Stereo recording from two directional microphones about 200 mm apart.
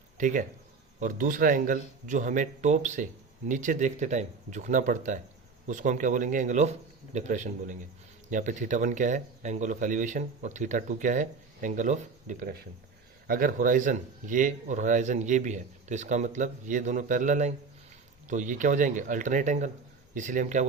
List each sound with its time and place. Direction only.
0.2 s speech: 40° right (ahead or behind)